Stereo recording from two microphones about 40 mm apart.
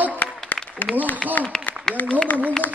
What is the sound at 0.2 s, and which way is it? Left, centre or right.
Applause, left.